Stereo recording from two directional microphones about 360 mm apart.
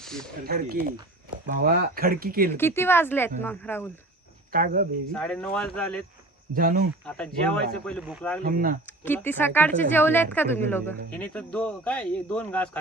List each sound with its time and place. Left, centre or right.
0.0 s a sound: centre
0.4 s speech: right
2.6 s speech: centre
4.5 s speech: right
5.1 s a woman's voice: centre
6.5 s speech: right
7.0 s a woman's voice: centre
8.4 s speech: right
8.9 s a woman's voice: centre